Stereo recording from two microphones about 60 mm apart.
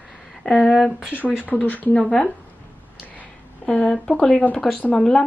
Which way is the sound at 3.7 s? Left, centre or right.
Centre.